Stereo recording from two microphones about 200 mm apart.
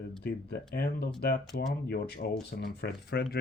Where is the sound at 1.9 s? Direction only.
50° left (ahead or behind).